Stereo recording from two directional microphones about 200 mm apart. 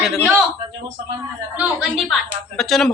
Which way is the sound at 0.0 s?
Centre (ahead or behind).